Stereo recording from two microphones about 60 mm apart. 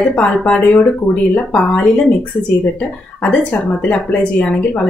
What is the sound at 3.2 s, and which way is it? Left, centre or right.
A woman's voice, left.